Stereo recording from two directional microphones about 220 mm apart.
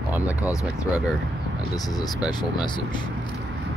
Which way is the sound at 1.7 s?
15° left (ahead or behind).